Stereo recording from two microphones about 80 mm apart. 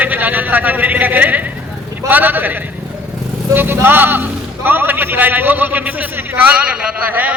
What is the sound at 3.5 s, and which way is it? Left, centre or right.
A man's voice, right.